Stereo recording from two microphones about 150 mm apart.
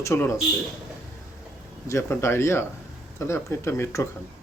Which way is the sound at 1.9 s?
20° left (ahead or behind).